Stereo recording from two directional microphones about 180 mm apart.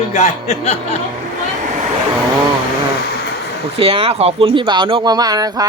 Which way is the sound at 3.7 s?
30° right (ahead or behind).